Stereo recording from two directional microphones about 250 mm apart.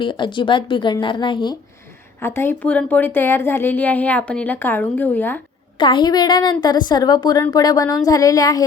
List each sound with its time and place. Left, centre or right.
0.0 s a woman's voice: centre
5.7 s speech: centre